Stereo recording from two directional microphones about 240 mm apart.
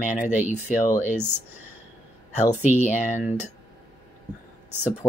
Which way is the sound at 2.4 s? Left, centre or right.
Left.